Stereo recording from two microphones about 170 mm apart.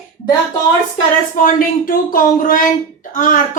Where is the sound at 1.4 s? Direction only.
55° left (ahead or behind).